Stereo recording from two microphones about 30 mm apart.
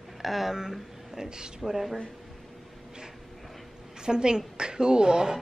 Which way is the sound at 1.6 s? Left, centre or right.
Centre.